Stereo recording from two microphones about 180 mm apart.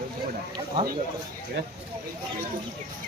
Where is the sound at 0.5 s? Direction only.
25° right (ahead or behind).